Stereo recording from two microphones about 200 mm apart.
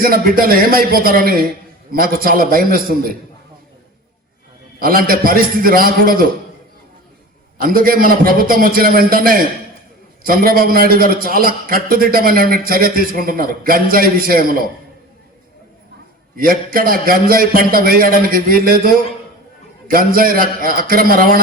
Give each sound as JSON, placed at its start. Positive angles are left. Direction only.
{"t": 0.0, "sound": "a man's voice", "side_deg": -45}
{"t": 4.8, "sound": "a man's voice", "side_deg": -45}
{"t": 7.6, "sound": "a man's voice", "side_deg": -45}
{"t": 16.4, "sound": "a man's voice", "side_deg": -45}